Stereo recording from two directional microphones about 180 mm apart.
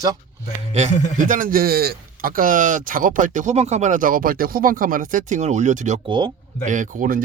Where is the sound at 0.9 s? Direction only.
40° left (ahead or behind).